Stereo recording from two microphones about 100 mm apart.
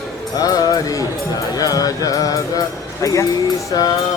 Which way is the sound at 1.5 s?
40° left (ahead or behind).